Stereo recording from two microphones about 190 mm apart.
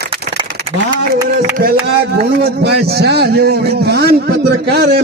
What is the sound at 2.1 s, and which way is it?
A man's voice, 60° right (ahead or behind).